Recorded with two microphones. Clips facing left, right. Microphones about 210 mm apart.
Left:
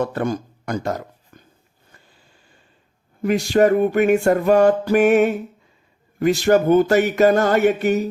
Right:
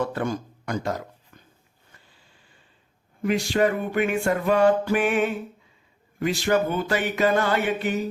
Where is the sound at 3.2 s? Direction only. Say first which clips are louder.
Left 6 dB; 45° left (ahead or behind).